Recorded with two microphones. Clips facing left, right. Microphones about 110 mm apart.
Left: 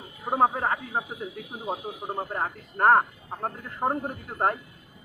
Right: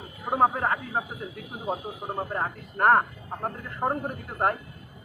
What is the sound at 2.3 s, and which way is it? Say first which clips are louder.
Speech: even; 15° left (ahead or behind).